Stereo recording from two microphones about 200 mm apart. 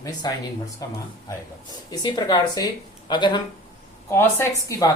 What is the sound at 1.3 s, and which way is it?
Speech, 20° left (ahead or behind).